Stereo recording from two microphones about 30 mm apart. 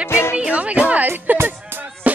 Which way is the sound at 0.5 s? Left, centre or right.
Right.